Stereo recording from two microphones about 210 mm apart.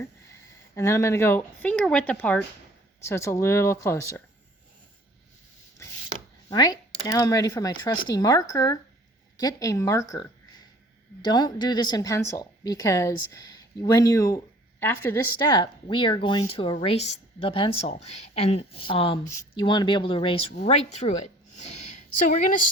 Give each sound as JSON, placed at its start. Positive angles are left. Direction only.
{"t": 0.8, "sound": "speech", "side_deg": 15}
{"t": 6.5, "sound": "a woman's voice", "side_deg": 20}